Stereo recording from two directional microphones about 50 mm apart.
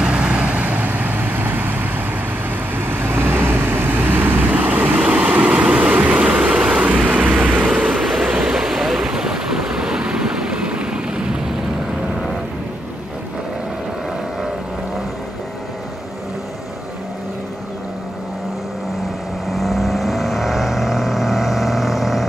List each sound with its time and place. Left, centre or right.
0.0 s vehicle: right
6.8 s vehicle: right
8.0 s vehicle: centre
8.5 s waves: centre
19.5 s vehicle: centre